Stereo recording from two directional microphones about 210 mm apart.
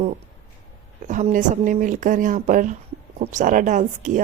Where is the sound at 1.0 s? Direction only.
35° right (ahead or behind).